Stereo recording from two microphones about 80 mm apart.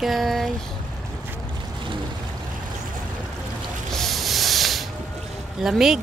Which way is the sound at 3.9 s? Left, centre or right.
Centre.